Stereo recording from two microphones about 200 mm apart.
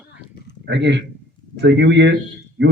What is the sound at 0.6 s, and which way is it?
Speech, 60° right (ahead or behind).